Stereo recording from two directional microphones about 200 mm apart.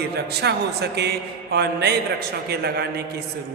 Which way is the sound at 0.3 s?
55° right (ahead or behind).